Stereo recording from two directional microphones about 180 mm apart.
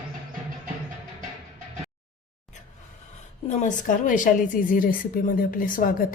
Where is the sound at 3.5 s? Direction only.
45° left (ahead or behind).